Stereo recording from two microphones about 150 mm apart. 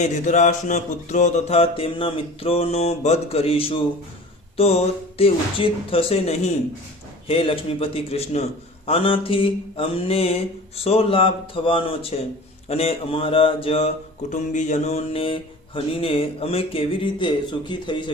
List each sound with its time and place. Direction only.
0.0 s mantra: 55° left (ahead or behind)
14.3 s mantra: 55° left (ahead or behind); by 18.1 s 30° left (ahead or behind)